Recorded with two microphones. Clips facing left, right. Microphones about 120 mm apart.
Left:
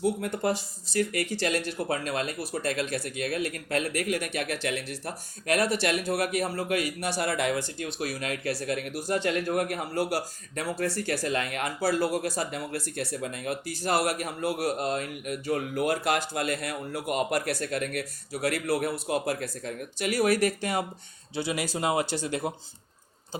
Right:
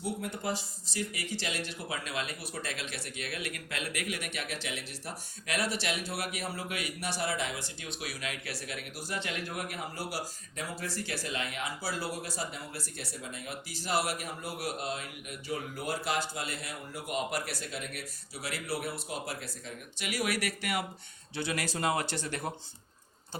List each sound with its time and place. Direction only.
0.0 s speech: 55° left (ahead or behind)
7.2 s speech: 60° left (ahead or behind); by 20.8 s 25° left (ahead or behind)
21.3 s speech: 15° left (ahead or behind)